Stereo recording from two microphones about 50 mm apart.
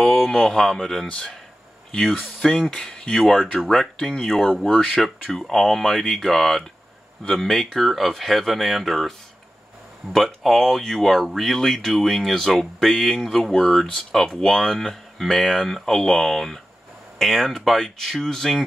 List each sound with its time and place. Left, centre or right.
0.0 s speech: centre
1.0 s speech: centre
2.0 s speech: centre
2.4 s speech: centre
2.9 s speech: centre
3.3 s speech: centre
4.8 s speech: centre
10.1 s speech: centre